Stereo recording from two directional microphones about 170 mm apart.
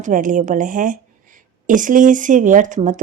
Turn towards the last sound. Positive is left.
turn(degrees=-50)  # may be behind; listen again after turning